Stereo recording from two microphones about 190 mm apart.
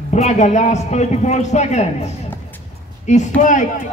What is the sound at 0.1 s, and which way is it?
A man's voice, 35° left (ahead or behind).